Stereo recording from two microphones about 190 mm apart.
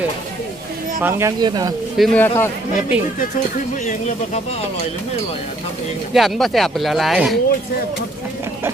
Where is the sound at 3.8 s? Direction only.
40° left (ahead or behind).